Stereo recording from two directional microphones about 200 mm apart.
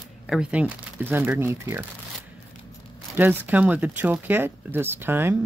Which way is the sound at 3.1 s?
10° right (ahead or behind).